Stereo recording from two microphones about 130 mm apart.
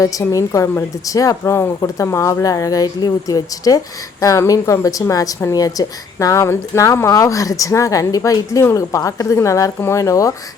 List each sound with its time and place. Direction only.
0.0 s a woman's voice: 25° left (ahead or behind)